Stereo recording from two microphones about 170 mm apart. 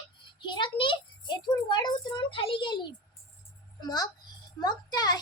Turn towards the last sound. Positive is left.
turn(degrees=25)  # may be behind; listen again after turning